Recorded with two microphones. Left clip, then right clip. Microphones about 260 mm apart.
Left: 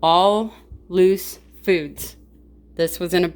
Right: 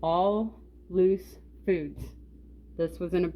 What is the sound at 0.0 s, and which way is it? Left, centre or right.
A woman's voice, centre.